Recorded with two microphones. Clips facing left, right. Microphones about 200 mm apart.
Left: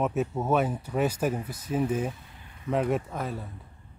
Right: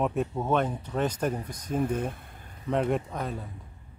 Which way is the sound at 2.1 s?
55° right (ahead or behind).